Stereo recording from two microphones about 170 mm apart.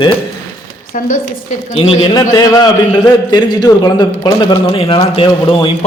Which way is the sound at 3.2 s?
25° left (ahead or behind).